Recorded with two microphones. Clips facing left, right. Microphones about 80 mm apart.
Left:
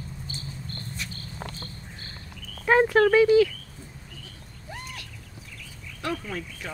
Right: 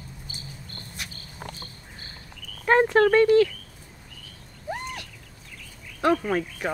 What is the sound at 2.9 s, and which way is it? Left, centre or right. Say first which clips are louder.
Speech: even; centre.